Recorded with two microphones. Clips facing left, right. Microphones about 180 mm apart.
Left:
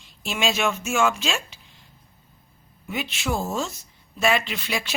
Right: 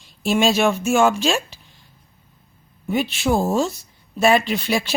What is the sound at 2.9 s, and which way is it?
Speech, 35° right (ahead or behind).